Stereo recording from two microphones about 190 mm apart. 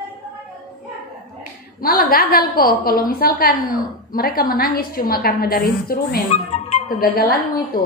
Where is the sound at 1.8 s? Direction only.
50° left (ahead or behind).